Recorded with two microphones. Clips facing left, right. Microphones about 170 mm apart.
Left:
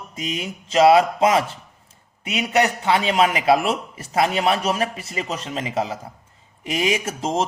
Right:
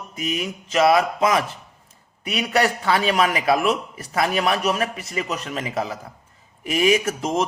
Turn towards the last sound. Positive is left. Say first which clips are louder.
# right 2 dB
turn(degrees=30)  # may be behind; listen again after turning